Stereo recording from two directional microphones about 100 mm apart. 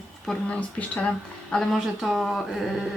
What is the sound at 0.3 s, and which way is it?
Speech, 10° left (ahead or behind).